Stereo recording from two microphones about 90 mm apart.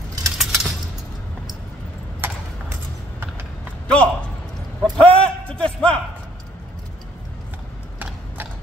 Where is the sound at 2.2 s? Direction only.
25° right (ahead or behind).